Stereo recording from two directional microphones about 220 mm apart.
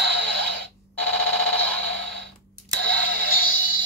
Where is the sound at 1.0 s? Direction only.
5° left (ahead or behind).